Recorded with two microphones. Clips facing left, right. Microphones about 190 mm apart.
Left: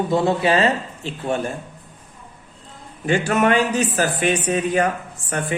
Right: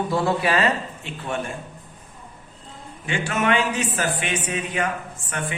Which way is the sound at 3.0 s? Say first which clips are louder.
Left 5 dB; 40° left (ahead or behind).